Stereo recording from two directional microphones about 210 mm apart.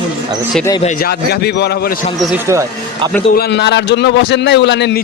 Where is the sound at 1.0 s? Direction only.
50° left (ahead or behind).